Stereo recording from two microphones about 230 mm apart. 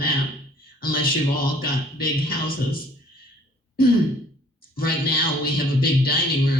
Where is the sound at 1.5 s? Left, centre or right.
Left.